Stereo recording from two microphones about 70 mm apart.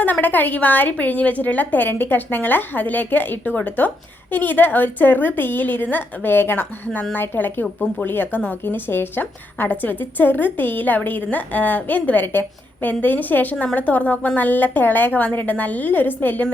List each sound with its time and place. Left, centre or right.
0.0 s a woman's voice: left